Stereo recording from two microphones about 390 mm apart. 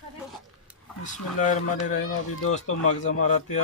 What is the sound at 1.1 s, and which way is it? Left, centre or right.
Speech, centre.